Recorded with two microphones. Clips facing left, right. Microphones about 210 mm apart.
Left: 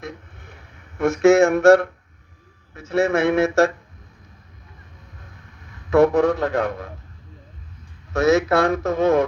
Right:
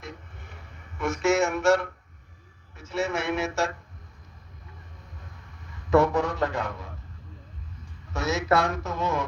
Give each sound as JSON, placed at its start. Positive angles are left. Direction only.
{"t": 0.9, "sound": "speech", "side_deg": 55}
{"t": 6.0, "sound": "speech", "side_deg": 60}
{"t": 8.1, "sound": "speech", "side_deg": 60}